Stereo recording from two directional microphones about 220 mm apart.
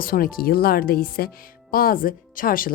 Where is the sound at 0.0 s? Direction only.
40° left (ahead or behind).